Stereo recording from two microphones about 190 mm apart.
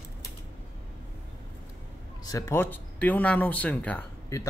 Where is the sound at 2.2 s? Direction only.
15° left (ahead or behind).